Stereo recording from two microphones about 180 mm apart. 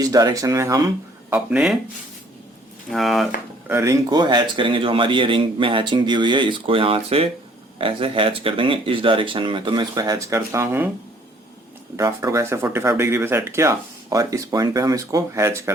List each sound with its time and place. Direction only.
0.0 s speech: 20° right (ahead or behind)
1.3 s speech: 5° right (ahead or behind)
2.9 s speech: centre (ahead or behind)
3.7 s speech: 15° right (ahead or behind)
11.9 s speech: 20° right (ahead or behind)